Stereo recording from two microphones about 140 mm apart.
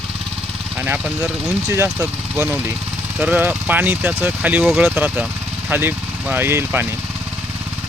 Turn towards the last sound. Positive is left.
turn(degrees=-15)  # may be behind; listen again after turning